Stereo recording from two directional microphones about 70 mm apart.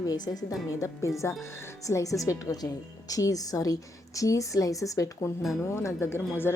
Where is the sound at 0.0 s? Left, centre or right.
Left.